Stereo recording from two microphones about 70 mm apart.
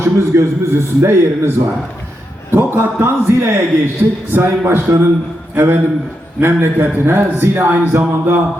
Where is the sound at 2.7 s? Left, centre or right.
Right.